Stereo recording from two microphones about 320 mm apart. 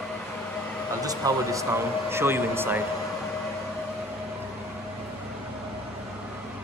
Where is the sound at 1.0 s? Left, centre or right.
Centre.